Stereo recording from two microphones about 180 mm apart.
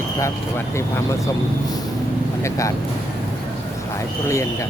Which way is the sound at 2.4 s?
15° left (ahead or behind).